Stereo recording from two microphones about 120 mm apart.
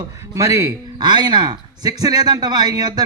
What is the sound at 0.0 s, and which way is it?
Speech, 25° right (ahead or behind).